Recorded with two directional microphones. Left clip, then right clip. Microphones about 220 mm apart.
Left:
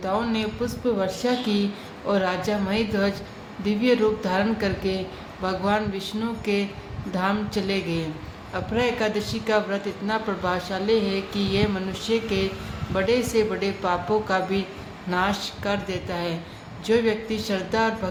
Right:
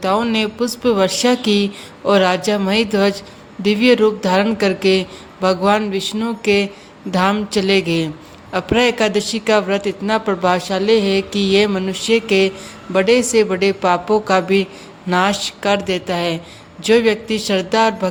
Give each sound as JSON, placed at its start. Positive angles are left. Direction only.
{"t": 0.0, "sound": "a man's voice", "side_deg": -40}